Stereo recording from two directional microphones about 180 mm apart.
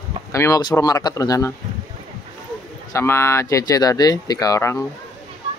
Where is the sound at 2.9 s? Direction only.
15° left (ahead or behind).